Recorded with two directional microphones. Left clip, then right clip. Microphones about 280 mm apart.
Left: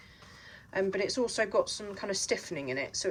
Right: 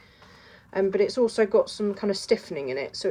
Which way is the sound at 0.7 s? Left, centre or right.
Centre.